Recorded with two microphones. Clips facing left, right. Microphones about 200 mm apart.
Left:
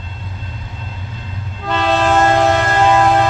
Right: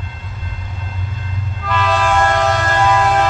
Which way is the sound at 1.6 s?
30° left (ahead or behind).